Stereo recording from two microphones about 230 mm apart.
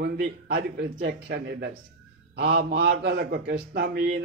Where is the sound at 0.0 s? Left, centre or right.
Right.